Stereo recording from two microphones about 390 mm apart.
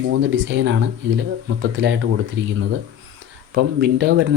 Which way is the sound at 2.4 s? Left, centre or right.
Right.